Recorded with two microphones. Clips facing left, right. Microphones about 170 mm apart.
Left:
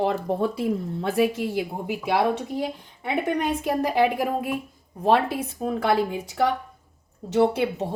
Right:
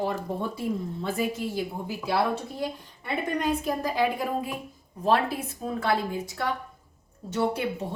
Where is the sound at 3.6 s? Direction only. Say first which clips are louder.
Left 4 dB; 70° left (ahead or behind).